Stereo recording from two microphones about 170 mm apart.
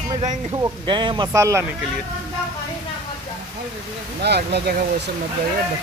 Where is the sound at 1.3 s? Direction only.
15° right (ahead or behind).